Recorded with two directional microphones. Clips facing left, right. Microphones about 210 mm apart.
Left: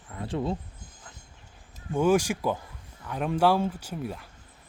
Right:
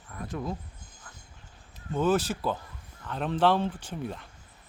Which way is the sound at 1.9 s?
10° left (ahead or behind).